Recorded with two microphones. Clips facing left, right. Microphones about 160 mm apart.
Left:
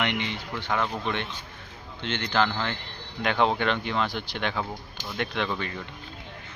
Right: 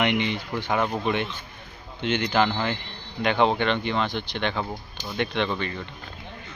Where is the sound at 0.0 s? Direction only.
15° right (ahead or behind); by 5.8 s 5° left (ahead or behind).